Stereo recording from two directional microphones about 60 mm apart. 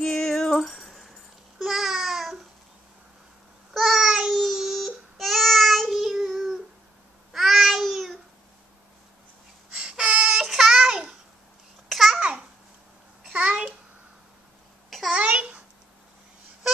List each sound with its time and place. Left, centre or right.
0.0 s music: centre
1.6 s babbling: centre
3.7 s babbling: centre
9.8 s a sound: centre
10.4 s child singing: centre
11.9 s babbling: centre
12.2 s babbling: centre
15.0 s babbling: centre